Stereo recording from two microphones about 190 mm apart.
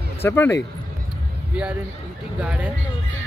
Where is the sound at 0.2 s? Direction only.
10° left (ahead or behind).